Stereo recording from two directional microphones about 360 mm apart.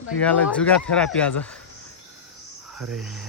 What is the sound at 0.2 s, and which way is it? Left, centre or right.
Speech, centre.